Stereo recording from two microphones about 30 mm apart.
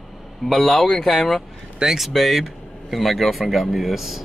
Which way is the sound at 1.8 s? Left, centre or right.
Right.